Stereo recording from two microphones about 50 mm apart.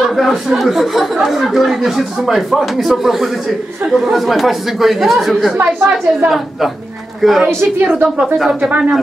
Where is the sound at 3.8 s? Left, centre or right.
Right.